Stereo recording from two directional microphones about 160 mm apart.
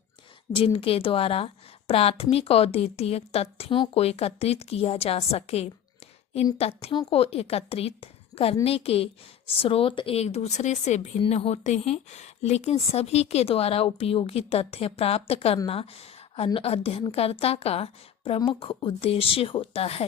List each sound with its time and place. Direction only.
0.5 s speech: 35° left (ahead or behind)